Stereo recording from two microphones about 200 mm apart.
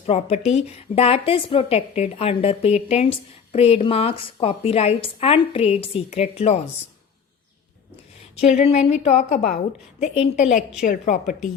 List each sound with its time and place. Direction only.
0.0 s a woman's voice: 30° left (ahead or behind)
8.5 s a woman's voice: 35° left (ahead or behind)